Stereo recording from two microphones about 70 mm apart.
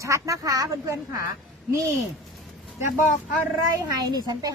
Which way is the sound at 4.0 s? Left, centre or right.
Right.